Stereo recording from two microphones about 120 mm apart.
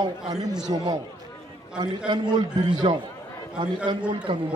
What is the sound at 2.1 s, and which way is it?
Speech, 40° right (ahead or behind).